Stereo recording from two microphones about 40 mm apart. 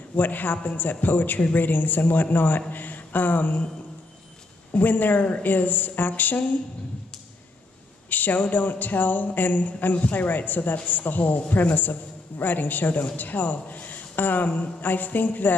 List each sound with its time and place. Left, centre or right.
0.1 s a man's voice: left
4.7 s a man's voice: left
8.1 s a man's voice: left